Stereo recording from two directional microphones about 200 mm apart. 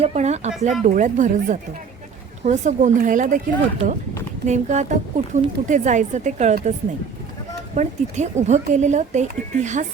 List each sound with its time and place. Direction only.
0.0 s a woman's voice: 35° right (ahead or behind)
4.4 s a woman's voice: 35° right (ahead or behind)
7.8 s a woman's voice: 35° right (ahead or behind)